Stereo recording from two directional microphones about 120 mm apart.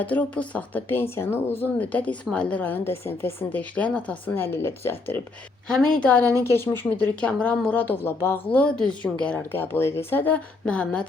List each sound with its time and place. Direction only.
0.0 s a woman's voice: 10° left (ahead or behind)
8.5 s a woman's voice: 10° left (ahead or behind)